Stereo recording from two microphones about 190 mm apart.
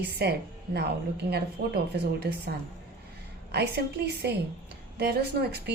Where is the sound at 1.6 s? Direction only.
55° right (ahead or behind).